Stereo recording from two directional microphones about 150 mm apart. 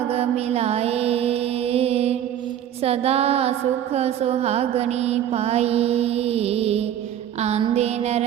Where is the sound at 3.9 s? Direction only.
45° right (ahead or behind).